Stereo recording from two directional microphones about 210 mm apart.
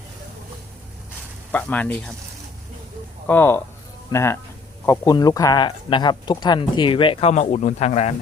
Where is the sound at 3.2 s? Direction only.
10° left (ahead or behind); by 8.1 s 30° left (ahead or behind).